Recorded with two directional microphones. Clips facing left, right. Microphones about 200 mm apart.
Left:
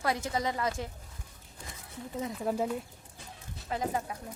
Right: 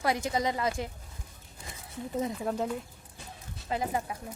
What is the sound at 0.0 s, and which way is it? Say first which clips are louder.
Speech: right 2 dB; 15° right (ahead or behind).